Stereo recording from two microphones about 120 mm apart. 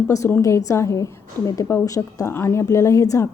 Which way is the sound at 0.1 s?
20° left (ahead or behind).